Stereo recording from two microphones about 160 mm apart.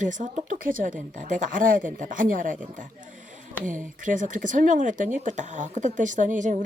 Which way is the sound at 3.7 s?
55° right (ahead or behind).